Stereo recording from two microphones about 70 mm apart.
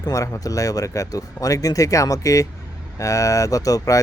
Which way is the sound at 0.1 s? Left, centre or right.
Left.